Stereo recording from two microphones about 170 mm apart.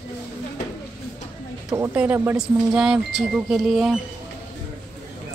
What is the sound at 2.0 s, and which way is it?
Speech, 10° right (ahead or behind).